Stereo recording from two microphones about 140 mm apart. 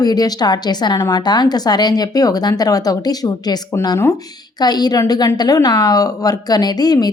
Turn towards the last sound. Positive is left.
turn(degrees=30)  # may be behind; listen again after turning